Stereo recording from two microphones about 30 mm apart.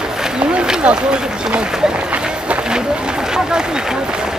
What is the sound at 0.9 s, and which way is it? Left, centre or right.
Run, right.